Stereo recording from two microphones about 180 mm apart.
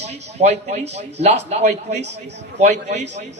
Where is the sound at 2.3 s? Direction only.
75° right (ahead or behind).